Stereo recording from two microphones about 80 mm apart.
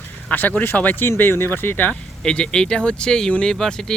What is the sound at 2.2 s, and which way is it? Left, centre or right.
Speech, centre.